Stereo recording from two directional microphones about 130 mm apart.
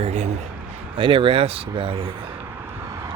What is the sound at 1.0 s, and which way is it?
Speech, 40° right (ahead or behind).